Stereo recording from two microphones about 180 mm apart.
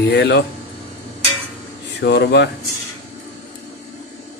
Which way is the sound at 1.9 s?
70° left (ahead or behind).